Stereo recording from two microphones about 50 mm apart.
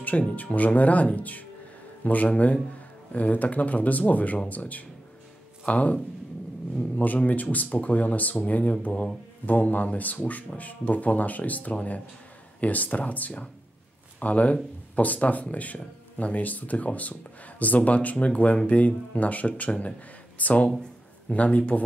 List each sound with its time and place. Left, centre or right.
0.4 s speech: left
7.2 s speech: left
9.5 s speech: left